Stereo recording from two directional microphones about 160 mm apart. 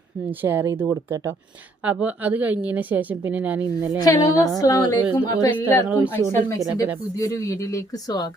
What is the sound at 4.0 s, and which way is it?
Speech, 25° left (ahead or behind).